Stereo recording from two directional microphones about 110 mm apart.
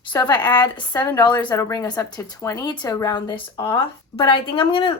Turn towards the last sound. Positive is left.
turn(degrees=50)  # may be behind; listen again after turning